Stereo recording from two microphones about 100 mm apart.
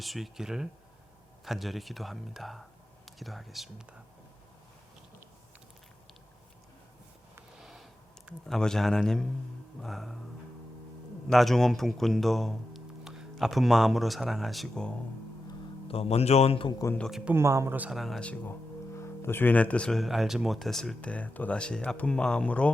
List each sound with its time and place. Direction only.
0.0 s speech: centre (ahead or behind)
7.6 s a sound: centre (ahead or behind)
8.3 s speech: 5° left (ahead or behind)
11.3 s speech: centre (ahead or behind)
15.9 s a man's voice: 85° left; by 16.7 s 65° left (ahead or behind)
17.1 s speech: 5° right (ahead or behind)
17.3 s speech: 30° right (ahead or behind)
17.9 s speech: centre (ahead or behind)
18.2 s speech: 15° left (ahead or behind)
18.9 s speech: 25° left (ahead or behind); by 20.0 s 10° left (ahead or behind)
20.0 s speech: centre (ahead or behind)